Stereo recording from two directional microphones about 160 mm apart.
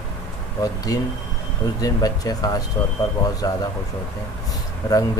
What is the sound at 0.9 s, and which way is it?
Speech, 20° left (ahead or behind).